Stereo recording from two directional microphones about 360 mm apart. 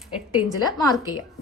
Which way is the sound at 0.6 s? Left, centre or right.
Centre.